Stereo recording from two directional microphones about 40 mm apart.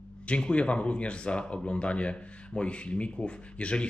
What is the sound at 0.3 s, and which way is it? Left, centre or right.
A man's voice, left.